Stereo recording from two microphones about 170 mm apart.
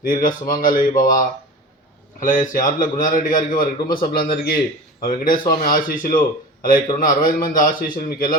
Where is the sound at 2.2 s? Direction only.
50° left (ahead or behind).